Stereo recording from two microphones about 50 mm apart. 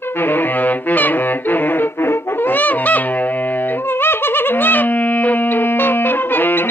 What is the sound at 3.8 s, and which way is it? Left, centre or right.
Music, left.